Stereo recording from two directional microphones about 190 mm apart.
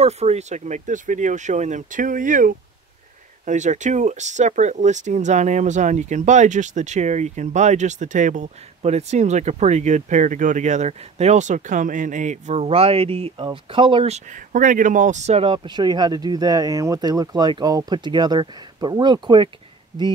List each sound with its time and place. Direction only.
0.0 s speech: 35° right (ahead or behind)